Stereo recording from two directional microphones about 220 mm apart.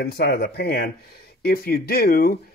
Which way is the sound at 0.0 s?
45° left (ahead or behind).